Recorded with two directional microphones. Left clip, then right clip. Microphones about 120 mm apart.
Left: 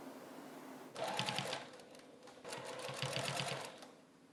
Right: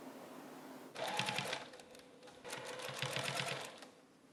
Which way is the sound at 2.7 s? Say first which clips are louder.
Even; 10° right (ahead or behind).